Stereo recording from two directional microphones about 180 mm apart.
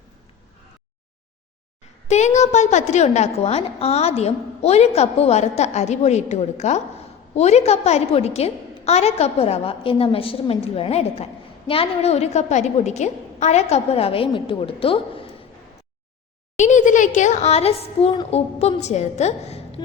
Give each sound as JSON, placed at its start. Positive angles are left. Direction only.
{"t": 2.0, "sound": "a woman's voice", "side_deg": 40}
{"t": 16.6, "sound": "a woman's voice", "side_deg": 45}